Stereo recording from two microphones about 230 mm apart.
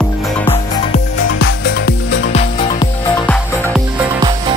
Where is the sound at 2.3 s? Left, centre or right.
Left.